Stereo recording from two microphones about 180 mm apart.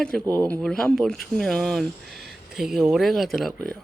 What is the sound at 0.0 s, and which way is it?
Speech, 5° left (ahead or behind).